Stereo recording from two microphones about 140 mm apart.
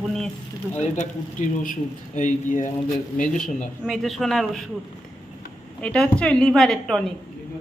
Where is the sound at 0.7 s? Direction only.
55° left (ahead or behind).